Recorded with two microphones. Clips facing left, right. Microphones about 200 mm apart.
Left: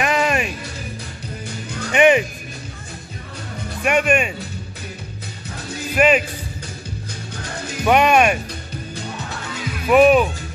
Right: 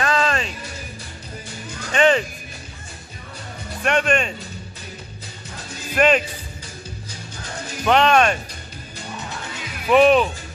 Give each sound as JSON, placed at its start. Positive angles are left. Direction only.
{"t": 0.0, "sound": "music", "side_deg": 15}
{"t": 1.9, "sound": "music", "side_deg": 15}
{"t": 3.8, "sound": "speech", "side_deg": 10}
{"t": 5.9, "sound": "speech", "side_deg": 5}
{"t": 7.8, "sound": "speech", "side_deg": 10}
{"t": 9.8, "sound": "speech", "side_deg": 5}